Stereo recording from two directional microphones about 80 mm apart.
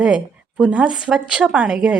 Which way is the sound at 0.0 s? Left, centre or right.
Centre.